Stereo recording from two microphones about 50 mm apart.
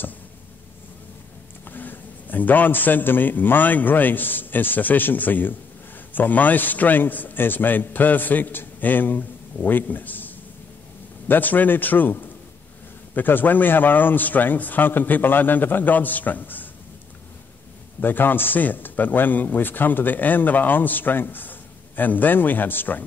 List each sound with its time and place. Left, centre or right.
1.6 s a man's voice: left
18.0 s a man's voice: left